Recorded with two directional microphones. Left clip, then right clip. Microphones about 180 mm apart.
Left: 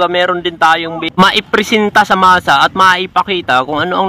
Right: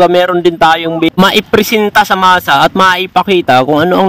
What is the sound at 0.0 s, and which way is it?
Speech, 40° right (ahead or behind).